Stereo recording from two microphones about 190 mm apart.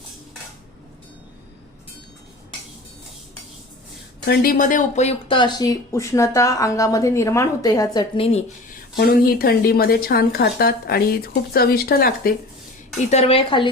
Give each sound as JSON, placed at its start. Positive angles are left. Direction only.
{"t": 4.3, "sound": "speech", "side_deg": 45}
{"t": 9.0, "sound": "speech", "side_deg": 55}
{"t": 13.1, "sound": "a woman's voice", "side_deg": 35}